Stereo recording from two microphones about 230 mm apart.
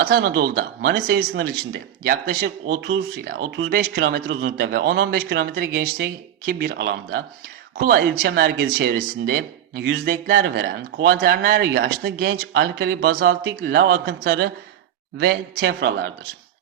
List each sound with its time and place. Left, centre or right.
0.0 s speech: right
3.3 s speech: right
3.7 s a man's voice: right